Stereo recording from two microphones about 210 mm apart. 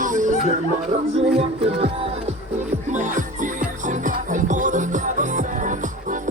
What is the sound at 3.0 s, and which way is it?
Music, 35° right (ahead or behind).